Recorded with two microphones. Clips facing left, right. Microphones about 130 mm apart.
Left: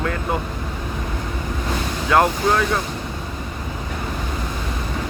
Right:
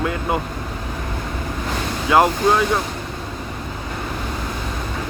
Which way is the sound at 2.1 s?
10° right (ahead or behind).